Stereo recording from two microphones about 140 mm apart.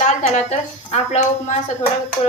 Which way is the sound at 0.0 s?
55° left (ahead or behind).